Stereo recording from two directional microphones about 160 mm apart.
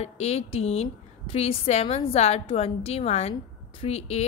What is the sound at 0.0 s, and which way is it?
A woman's voice, 40° left (ahead or behind).